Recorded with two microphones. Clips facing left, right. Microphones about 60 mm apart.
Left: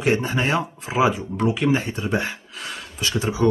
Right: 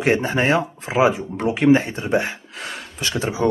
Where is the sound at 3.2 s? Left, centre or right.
Right.